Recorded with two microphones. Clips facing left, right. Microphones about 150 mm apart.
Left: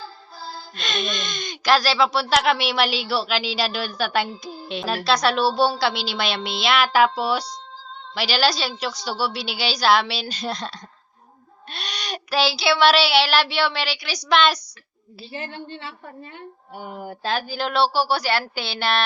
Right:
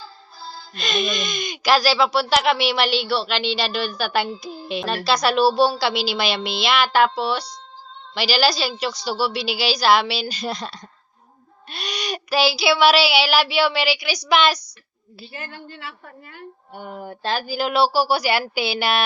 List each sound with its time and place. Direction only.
0.8 s speech: 5° right (ahead or behind)
15.3 s a woman's voice: 25° left (ahead or behind)
16.7 s speech: 5° left (ahead or behind)